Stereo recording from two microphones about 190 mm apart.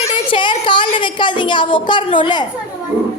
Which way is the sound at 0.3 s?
25° left (ahead or behind).